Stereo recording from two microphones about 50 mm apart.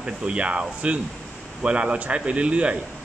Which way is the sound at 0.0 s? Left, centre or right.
Right.